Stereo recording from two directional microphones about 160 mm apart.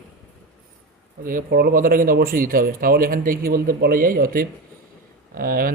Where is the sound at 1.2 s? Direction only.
60° right (ahead or behind).